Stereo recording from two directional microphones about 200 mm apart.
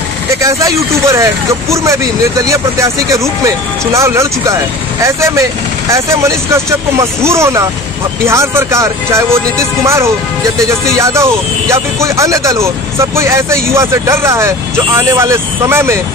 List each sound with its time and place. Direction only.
0.4 s speech: 15° right (ahead or behind)